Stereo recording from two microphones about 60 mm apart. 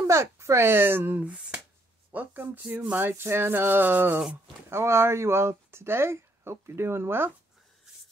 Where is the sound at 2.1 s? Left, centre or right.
Right.